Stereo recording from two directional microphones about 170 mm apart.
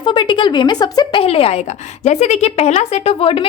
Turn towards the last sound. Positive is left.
turn(degrees=35)  # may be behind; listen again after turning